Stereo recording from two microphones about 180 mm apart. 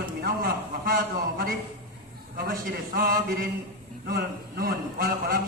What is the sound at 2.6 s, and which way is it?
A man's voice, 50° right (ahead or behind).